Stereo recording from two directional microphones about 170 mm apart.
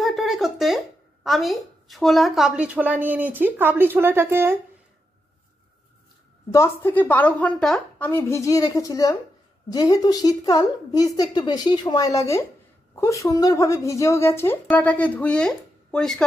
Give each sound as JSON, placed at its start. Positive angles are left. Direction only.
{"t": 0.0, "sound": "speech", "side_deg": 0}
{"t": 6.5, "sound": "speech", "side_deg": 15}
{"t": 8.1, "sound": "a woman's voice", "side_deg": 15}